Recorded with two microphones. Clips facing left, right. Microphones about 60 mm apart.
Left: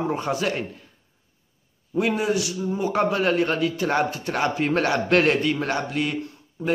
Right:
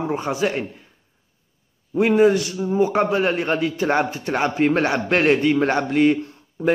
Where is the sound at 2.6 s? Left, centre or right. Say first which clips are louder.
Right 5 dB; right.